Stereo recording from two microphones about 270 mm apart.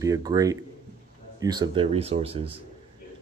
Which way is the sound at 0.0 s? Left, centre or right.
Centre.